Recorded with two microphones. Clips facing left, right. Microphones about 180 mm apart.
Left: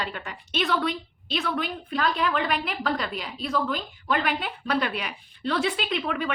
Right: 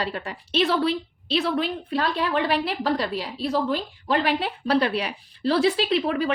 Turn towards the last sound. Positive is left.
turn(degrees=-35)  # may be behind; listen again after turning